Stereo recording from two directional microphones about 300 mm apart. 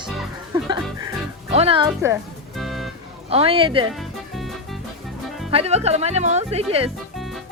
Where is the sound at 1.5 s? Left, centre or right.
Centre.